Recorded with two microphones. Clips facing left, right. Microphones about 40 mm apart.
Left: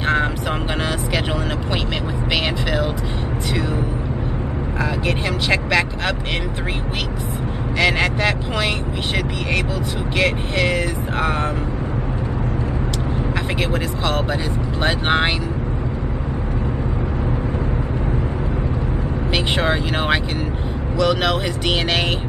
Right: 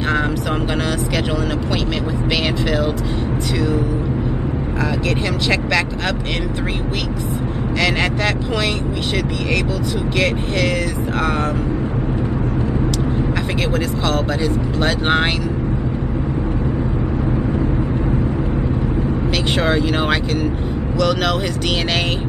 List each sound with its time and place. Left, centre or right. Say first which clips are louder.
5.0 s speech: right 2 dB; left
7.8 s speech: left 1 dB; centre
10.1 s speech: left 1 dB; left
15.0 s speech: even; centre
19.3 s speech: right 1 dB; centre